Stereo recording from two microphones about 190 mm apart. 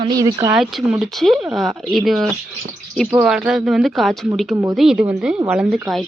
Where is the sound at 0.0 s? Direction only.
20° right (ahead or behind).